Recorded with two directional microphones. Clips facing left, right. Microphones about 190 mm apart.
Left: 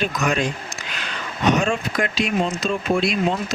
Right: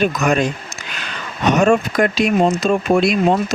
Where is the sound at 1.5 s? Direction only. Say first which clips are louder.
Right 7 dB; 45° right (ahead or behind).